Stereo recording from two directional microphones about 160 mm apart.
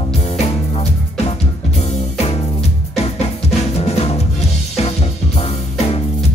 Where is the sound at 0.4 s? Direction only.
40° left (ahead or behind).